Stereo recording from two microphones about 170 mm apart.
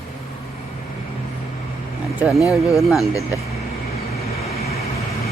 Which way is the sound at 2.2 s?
Centre (ahead or behind).